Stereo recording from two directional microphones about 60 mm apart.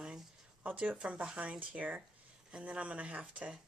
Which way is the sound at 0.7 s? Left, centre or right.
Right.